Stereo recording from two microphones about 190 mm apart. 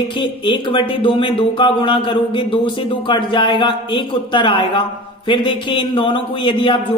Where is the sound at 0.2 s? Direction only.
25° left (ahead or behind).